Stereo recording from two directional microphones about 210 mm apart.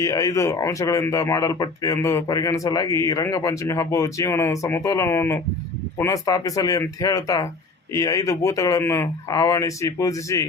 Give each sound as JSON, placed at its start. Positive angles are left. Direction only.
{"t": 0.0, "sound": "speech", "side_deg": 15}